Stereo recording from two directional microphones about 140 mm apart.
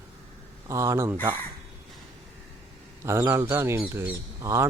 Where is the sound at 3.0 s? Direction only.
15° right (ahead or behind).